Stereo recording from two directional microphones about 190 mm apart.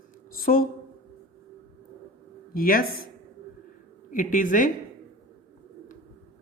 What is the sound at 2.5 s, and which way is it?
Speech, 50° left (ahead or behind).